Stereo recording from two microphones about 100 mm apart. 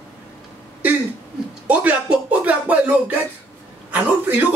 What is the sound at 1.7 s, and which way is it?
Speech, 15° right (ahead or behind).